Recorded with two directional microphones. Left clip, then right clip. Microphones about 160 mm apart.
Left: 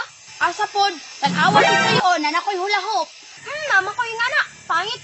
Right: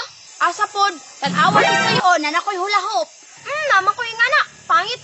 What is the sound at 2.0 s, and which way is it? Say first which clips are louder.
Speech: right 2 dB; 25° right (ahead or behind).